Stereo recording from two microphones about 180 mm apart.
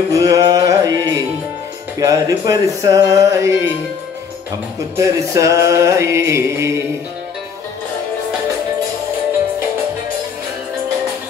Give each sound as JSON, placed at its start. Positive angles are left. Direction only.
{"t": 0.1, "sound": "music", "side_deg": -20}
{"t": 2.0, "sound": "speech", "side_deg": -20}
{"t": 4.9, "sound": "music", "side_deg": -20}